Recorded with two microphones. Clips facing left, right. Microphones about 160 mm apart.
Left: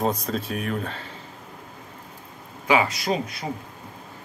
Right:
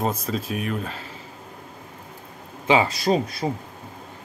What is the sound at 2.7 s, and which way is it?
Speech, 30° right (ahead or behind).